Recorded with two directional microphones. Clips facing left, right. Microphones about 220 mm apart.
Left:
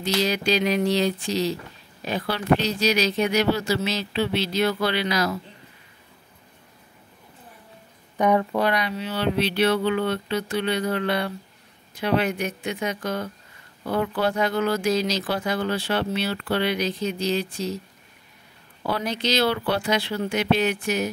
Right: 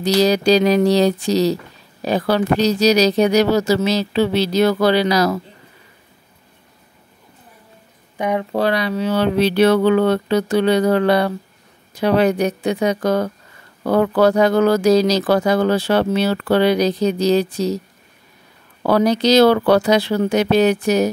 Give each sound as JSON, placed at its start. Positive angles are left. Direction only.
{"t": 0.0, "sound": "speech", "side_deg": -40}
{"t": 8.2, "sound": "speech", "side_deg": -15}
{"t": 8.5, "sound": "speech", "side_deg": -30}
{"t": 11.9, "sound": "speech", "side_deg": -40}
{"t": 18.9, "sound": "speech", "side_deg": -40}